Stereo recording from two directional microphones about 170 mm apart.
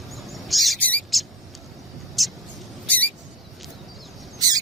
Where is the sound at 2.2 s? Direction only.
Centre (ahead or behind).